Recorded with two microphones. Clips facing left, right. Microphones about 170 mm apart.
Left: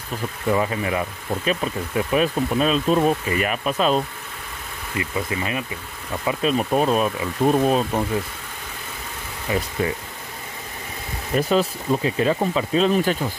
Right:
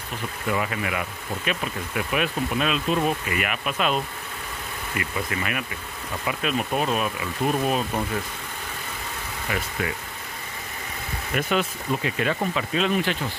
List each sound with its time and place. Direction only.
0.5 s speech: 30° left (ahead or behind)
9.5 s speech: 30° left (ahead or behind)
11.3 s speech: 35° left (ahead or behind)